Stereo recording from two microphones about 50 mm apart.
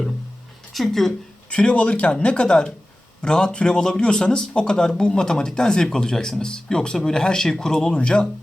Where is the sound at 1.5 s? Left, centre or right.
Left.